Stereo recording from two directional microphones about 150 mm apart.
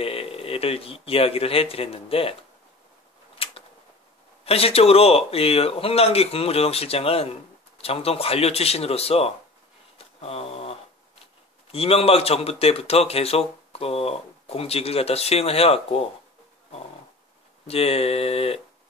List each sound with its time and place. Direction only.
0.0 s speech: 40° left (ahead or behind)
3.4 s a sound: 40° left (ahead or behind)
4.5 s speech: 40° left (ahead or behind)
9.9 s a sound: 40° left (ahead or behind)
11.7 s speech: 40° left (ahead or behind)
17.6 s speech: 40° left (ahead or behind)